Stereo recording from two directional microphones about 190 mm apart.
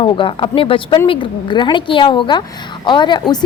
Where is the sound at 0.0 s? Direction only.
25° left (ahead or behind).